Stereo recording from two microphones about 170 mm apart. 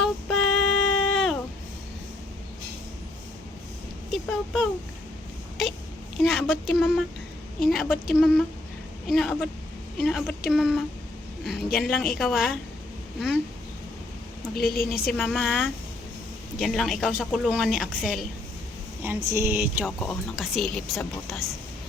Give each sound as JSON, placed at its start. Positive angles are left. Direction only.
{"t": 0.0, "sound": "a sound", "side_deg": 0}
{"t": 4.1, "sound": "speech", "side_deg": 0}
{"t": 6.2, "sound": "a woman's voice", "side_deg": 0}
{"t": 14.5, "sound": "a woman's voice", "side_deg": 65}
{"t": 15.2, "sound": "speech", "side_deg": 0}
{"t": 19.3, "sound": "speech", "side_deg": -15}